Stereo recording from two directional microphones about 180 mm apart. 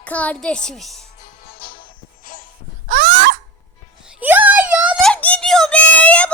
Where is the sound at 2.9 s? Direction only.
50° right (ahead or behind).